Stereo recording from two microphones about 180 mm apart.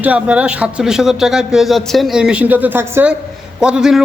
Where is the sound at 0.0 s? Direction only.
10° right (ahead or behind).